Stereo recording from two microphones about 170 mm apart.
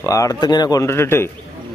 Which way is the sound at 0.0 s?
20° left (ahead or behind).